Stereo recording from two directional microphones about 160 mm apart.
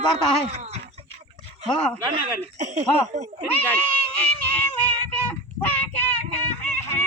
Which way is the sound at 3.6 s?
10° left (ahead or behind).